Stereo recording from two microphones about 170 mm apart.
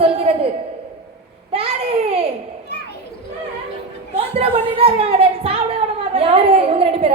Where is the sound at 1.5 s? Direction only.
35° right (ahead or behind).